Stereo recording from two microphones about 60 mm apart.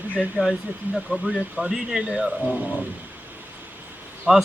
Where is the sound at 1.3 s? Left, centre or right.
Centre.